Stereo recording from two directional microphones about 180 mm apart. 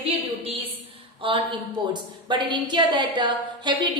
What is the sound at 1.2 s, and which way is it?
A woman's voice, 30° right (ahead or behind).